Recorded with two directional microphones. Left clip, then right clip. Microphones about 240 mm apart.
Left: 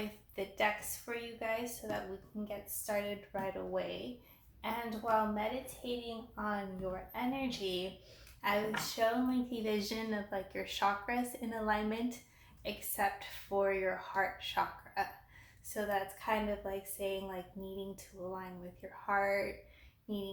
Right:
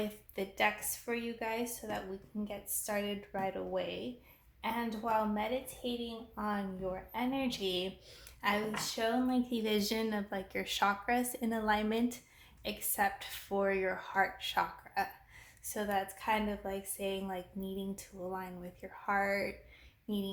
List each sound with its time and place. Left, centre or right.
0.3 s a woman's voice: right